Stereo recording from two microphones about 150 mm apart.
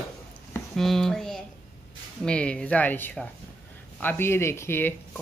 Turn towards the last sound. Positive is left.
turn(degrees=15)  # may be behind; listen again after turning